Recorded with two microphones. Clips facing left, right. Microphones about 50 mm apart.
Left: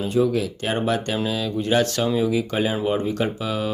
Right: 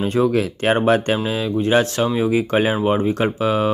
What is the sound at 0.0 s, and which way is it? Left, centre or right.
Speech, right.